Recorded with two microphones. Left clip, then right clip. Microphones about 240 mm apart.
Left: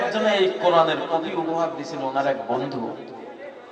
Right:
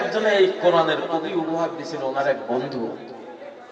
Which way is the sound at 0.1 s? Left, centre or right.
Left.